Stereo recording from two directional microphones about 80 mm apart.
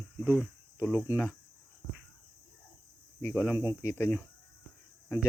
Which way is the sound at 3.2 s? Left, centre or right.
Left.